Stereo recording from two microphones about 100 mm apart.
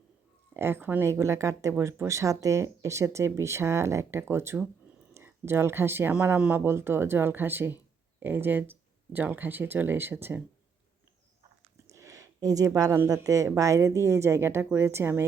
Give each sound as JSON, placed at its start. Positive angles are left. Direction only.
{"t": 0.5, "sound": "speech", "side_deg": -25}
{"t": 6.1, "sound": "speech", "side_deg": -10}
{"t": 11.9, "sound": "a sound", "side_deg": -30}
{"t": 13.1, "sound": "speech", "side_deg": -35}